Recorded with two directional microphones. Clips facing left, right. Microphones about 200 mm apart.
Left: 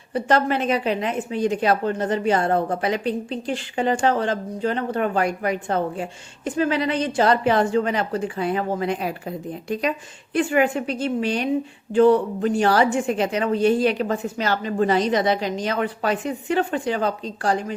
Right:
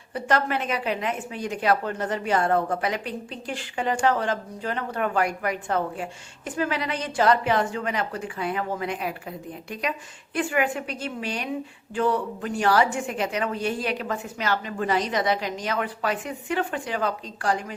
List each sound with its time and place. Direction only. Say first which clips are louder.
0.1 s a woman's voice: left 4 dB; 30° left (ahead or behind)